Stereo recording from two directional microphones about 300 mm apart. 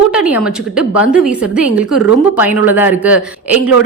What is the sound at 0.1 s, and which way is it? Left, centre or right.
A woman's voice, centre.